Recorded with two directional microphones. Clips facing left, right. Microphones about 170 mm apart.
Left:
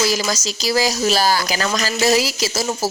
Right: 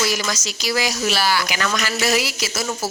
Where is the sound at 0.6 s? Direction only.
35° left (ahead or behind).